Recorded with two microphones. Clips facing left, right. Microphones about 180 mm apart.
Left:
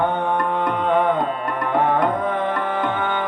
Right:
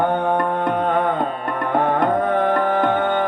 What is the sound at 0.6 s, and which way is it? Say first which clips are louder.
Music: even; 55° right (ahead or behind).